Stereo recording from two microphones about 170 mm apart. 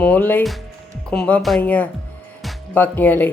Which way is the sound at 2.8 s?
10° left (ahead or behind).